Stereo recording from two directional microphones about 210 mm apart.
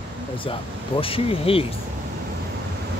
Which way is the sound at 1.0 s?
25° left (ahead or behind).